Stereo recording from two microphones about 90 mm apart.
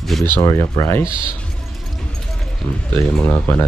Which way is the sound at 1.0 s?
70° right (ahead or behind).